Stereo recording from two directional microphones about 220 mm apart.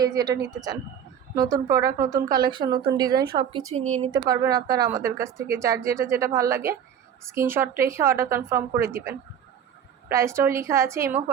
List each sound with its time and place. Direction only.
0.0 s speech: 15° right (ahead or behind)
1.4 s a woman's voice: 15° right (ahead or behind); by 4.1 s 30° right (ahead or behind)
4.1 s speech: 15° right (ahead or behind)